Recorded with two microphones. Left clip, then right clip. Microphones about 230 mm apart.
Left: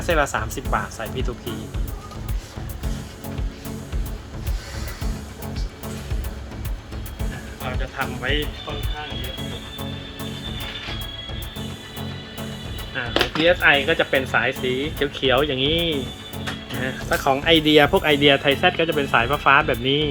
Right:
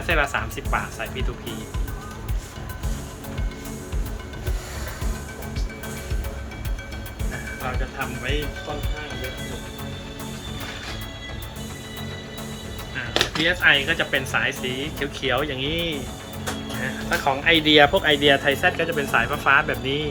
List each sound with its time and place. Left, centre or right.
0.0 s speech: left
13.1 s speech: left
16.8 s speech: left